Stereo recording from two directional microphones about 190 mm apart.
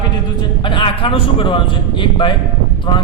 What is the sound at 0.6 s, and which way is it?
A man's voice, 25° left (ahead or behind).